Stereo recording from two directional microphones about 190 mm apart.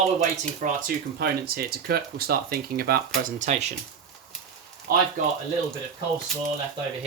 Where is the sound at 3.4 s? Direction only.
40° right (ahead or behind).